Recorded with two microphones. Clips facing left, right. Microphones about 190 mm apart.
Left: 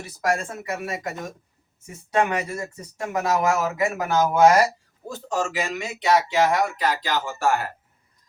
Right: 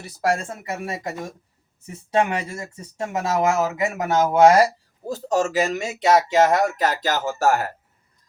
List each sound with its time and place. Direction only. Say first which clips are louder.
0.2 s speech: right 2 dB; 30° right (ahead or behind)
5.0 s speech: right 5 dB; 40° right (ahead or behind)